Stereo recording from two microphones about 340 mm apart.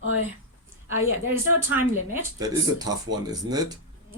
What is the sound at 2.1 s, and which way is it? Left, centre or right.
Speech, centre.